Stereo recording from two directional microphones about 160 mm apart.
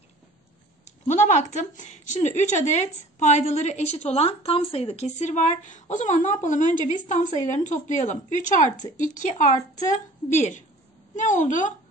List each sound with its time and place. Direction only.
0.8 s speech: 50° left (ahead or behind)